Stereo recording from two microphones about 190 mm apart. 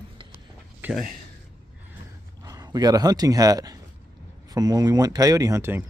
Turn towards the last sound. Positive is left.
turn(degrees=-15)  # may be behind; listen again after turning